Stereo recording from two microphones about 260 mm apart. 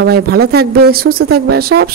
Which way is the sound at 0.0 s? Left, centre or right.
Right.